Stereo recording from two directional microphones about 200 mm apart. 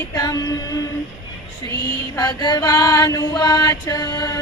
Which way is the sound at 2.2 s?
20° left (ahead or behind).